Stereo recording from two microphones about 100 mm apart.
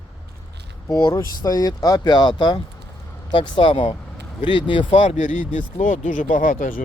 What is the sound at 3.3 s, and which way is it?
Speech, 60° left (ahead or behind).